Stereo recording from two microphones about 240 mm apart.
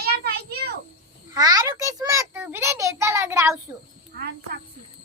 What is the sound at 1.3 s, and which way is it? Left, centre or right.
A child's voice, centre.